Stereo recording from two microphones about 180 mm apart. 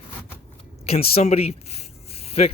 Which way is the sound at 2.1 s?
35° left (ahead or behind).